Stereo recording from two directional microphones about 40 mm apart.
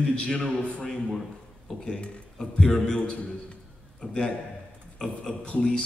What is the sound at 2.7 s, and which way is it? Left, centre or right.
Speech, centre.